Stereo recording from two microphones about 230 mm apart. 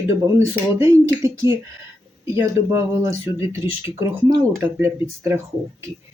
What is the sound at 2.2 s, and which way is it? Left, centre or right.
Speech, centre.